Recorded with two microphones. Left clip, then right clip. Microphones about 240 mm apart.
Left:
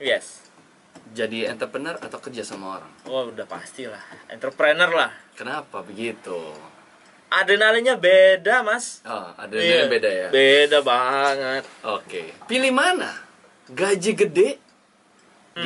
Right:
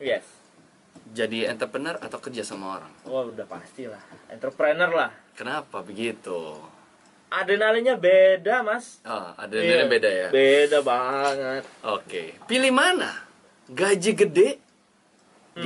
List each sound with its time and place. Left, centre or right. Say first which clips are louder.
1.1 s speech: left 1 dB; centre
3.1 s speech: left 2 dB; centre
3.3 s speech: left 3 dB; centre